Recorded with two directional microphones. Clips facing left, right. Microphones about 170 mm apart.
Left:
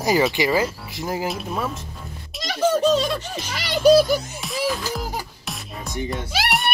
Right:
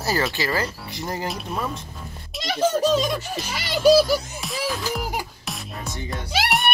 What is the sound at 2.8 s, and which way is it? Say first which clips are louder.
A child's voice: left 1 dB; 10° right (ahead or behind).